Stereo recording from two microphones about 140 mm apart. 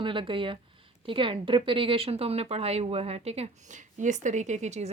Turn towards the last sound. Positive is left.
turn(degrees=-55)  # may be behind; listen again after turning